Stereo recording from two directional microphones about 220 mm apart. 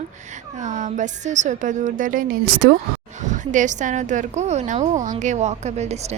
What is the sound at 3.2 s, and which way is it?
A woman's voice, 35° right (ahead or behind).